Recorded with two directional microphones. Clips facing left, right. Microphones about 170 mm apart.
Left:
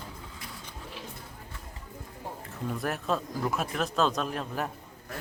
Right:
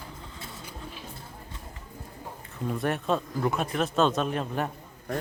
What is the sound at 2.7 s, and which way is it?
Speech, centre (ahead or behind).